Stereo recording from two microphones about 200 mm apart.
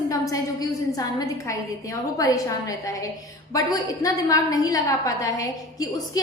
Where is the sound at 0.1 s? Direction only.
15° left (ahead or behind).